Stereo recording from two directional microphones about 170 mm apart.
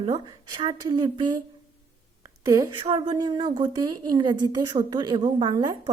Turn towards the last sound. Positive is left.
turn(degrees=-25)  # may be behind; listen again after turning